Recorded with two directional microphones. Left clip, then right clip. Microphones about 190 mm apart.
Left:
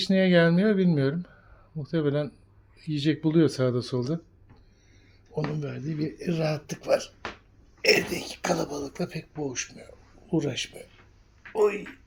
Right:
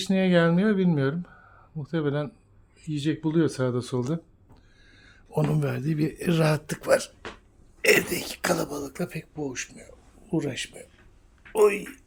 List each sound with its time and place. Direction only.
0.0 s speech: centre (ahead or behind)
5.3 s speech: 40° right (ahead or behind)
7.8 s speech: 20° right (ahead or behind); by 10.8 s centre (ahead or behind)
11.5 s speech: 30° right (ahead or behind)